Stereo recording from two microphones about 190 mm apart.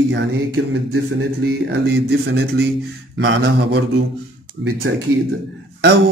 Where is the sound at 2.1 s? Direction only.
60° right (ahead or behind).